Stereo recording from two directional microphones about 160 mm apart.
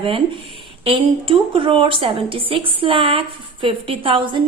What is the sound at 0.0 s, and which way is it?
Speech, 35° right (ahead or behind).